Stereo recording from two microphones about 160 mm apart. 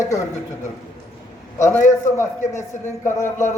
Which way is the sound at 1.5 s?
20° left (ahead or behind).